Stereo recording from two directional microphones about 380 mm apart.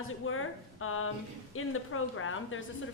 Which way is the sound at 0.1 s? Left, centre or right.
Left.